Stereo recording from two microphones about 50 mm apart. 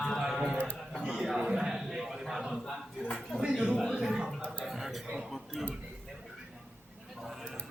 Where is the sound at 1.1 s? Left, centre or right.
Centre.